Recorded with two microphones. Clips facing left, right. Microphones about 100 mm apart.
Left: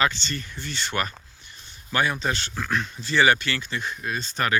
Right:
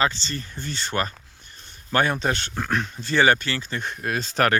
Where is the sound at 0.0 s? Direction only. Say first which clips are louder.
Right 1 dB; 35° right (ahead or behind); by 4.5 s 90° right.